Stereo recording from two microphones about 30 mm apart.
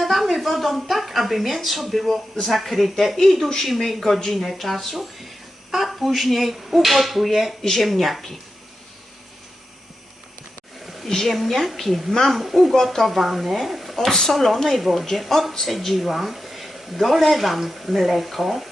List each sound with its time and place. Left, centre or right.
0.0 s speech: centre
10.8 s a sound: centre
11.1 s a woman's voice: centre
12.8 s speech: centre
14.1 s a woman's voice: centre
14.7 s speech: centre